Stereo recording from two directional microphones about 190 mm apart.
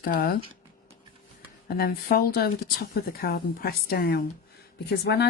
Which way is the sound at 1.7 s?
55° left (ahead or behind).